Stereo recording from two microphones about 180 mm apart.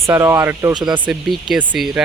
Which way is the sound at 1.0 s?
10° right (ahead or behind).